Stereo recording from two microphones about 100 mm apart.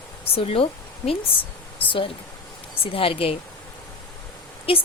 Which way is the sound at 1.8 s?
60° left (ahead or behind).